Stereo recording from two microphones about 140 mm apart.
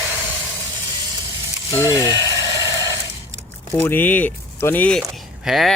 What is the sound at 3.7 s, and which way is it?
Speech, 15° left (ahead or behind).